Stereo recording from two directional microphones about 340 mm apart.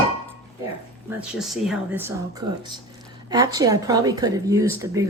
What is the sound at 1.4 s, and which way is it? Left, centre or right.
Speech, centre.